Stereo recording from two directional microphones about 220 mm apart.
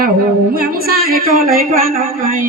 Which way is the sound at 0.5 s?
45° right (ahead or behind).